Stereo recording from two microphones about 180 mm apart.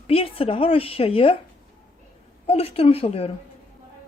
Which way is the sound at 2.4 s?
35° left (ahead or behind).